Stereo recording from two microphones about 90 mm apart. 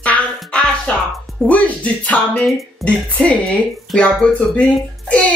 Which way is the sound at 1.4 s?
5° left (ahead or behind).